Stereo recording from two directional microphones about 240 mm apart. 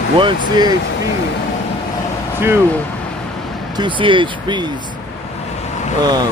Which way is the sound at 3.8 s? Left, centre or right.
Right.